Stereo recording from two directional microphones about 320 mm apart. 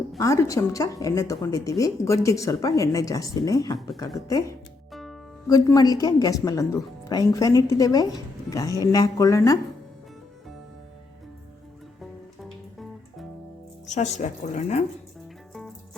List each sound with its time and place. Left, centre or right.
0.2 s a woman's voice: centre
4.9 s music: centre
5.5 s a woman's voice: centre
13.8 s a woman's voice: left